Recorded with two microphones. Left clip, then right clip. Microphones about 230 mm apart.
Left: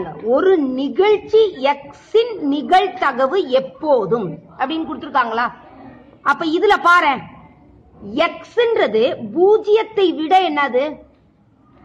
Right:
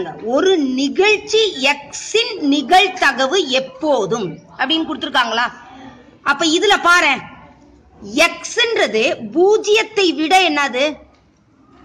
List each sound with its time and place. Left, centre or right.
0.0 s a woman's voice: right